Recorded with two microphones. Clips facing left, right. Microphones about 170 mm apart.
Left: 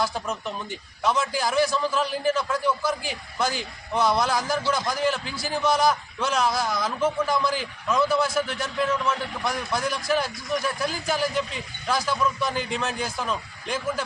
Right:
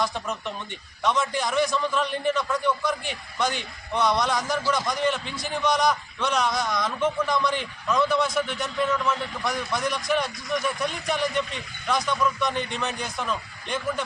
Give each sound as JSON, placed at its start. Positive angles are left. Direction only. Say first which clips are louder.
{"t": 0.0, "sound": "a man's voice", "louder": "left 1 dB", "side_deg": 0}